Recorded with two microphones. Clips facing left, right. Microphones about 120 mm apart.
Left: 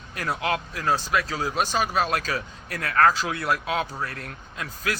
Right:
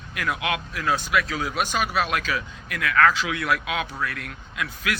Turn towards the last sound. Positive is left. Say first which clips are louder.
# right 1 dB
turn(degrees=35)  # may be behind; listen again after turning